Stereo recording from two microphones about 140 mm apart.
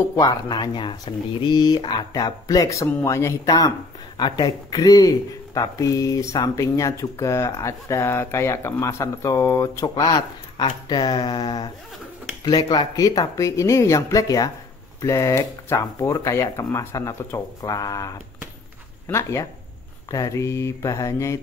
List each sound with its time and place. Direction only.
0.2 s speech: 30° left (ahead or behind)
10.0 s speech: 35° left (ahead or behind)